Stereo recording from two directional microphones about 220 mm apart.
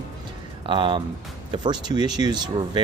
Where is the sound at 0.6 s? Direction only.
25° right (ahead or behind).